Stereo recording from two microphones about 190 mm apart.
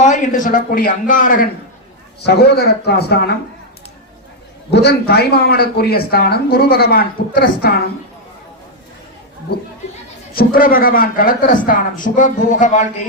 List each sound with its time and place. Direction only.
0.0 s speech: 40° left (ahead or behind)
2.2 s a man's voice: 60° left (ahead or behind)
4.7 s a man's voice: 60° left (ahead or behind)
9.5 s speech: 55° left (ahead or behind); by 13.1 s 40° left (ahead or behind)